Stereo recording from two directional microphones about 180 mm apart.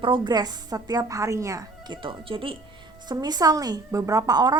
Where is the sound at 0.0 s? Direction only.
25° right (ahead or behind).